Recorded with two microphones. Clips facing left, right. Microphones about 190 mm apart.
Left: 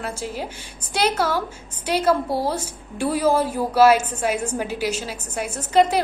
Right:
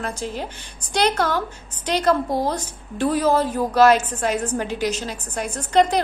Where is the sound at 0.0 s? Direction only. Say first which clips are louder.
Right 1 dB; 10° left (ahead or behind).